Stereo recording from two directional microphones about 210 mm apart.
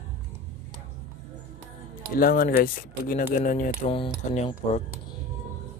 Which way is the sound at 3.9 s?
30° left (ahead or behind).